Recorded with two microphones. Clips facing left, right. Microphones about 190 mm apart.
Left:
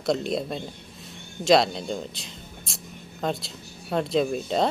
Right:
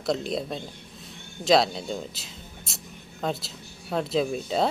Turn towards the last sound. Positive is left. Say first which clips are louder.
# left 1 dB
turn(degrees=0)  # may be behind; listen again after turning